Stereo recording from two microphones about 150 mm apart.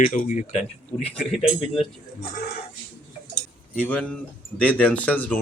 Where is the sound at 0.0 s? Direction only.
65° left (ahead or behind).